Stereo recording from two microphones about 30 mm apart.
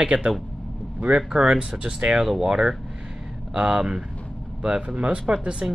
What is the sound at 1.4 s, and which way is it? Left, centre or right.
Speech, right.